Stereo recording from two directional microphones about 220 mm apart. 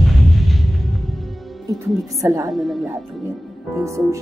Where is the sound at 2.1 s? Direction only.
15° right (ahead or behind).